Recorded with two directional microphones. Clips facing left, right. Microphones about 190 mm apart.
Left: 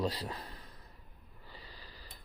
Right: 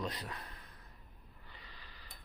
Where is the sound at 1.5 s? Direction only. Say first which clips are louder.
Left 5 dB; 35° left (ahead or behind).